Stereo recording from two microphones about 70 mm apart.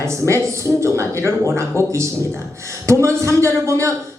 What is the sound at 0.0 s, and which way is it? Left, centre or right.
A man's voice, right.